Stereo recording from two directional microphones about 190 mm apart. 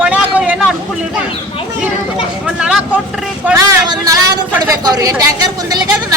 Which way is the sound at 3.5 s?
20° right (ahead or behind).